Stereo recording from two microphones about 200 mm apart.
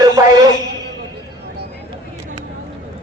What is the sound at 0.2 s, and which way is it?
Music, 15° right (ahead or behind).